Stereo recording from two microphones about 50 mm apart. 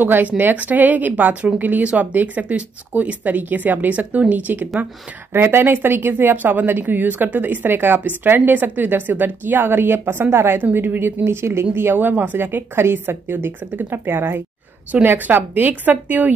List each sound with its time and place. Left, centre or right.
0.0 s speech: right
5.3 s a woman's voice: right
10.6 s a woman's voice: right
11.2 s speech: right
11.7 s a woman's voice: right